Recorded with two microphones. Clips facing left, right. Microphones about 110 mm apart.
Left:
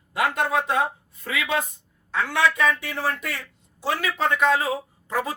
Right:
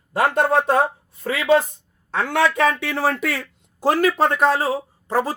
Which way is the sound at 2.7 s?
90° right.